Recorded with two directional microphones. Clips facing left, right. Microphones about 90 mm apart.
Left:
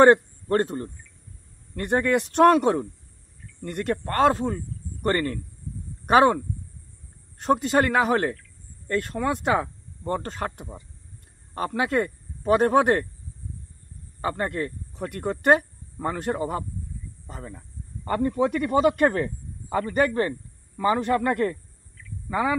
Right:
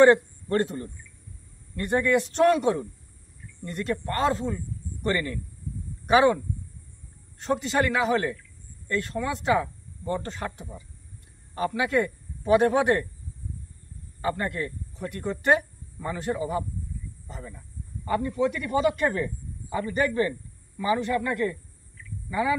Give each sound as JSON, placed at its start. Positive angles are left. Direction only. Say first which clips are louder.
{"t": 0.0, "sound": "speech", "louder": "left 1 dB", "side_deg": 45}
{"t": 1.8, "sound": "a man's voice", "louder": "left 1 dB", "side_deg": 55}
{"t": 14.2, "sound": "a man's voice", "louder": "left 1 dB", "side_deg": 35}
{"t": 15.0, "sound": "speech", "louder": "left 3 dB", "side_deg": 60}